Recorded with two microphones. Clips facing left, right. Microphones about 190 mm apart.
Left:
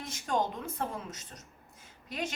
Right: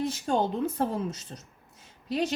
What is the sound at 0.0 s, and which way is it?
A woman's voice, 30° right (ahead or behind).